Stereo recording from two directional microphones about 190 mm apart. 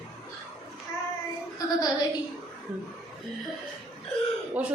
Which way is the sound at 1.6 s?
20° left (ahead or behind).